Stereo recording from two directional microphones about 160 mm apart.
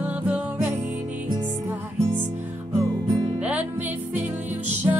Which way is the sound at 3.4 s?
10° right (ahead or behind).